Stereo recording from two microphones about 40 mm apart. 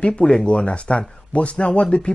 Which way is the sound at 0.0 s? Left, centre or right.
Left.